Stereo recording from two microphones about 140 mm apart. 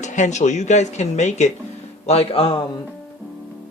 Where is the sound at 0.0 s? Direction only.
60° left (ahead or behind); by 2.6 s 40° left (ahead or behind).